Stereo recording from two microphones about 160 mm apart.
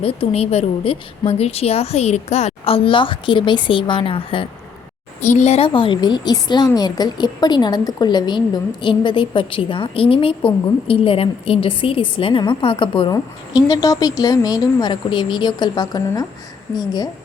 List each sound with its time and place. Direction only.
0.0 s a woman's voice: 35° left (ahead or behind)
5.2 s a woman's voice: 45° left (ahead or behind); by 17.1 s 25° left (ahead or behind)